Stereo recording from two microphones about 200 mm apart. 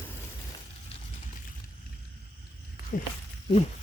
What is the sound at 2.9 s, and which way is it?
Speech, 40° left (ahead or behind).